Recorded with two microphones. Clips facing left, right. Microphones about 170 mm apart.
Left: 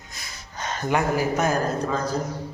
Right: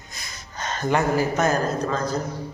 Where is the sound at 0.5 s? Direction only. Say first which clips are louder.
Right 1 dB; 10° left (ahead or behind).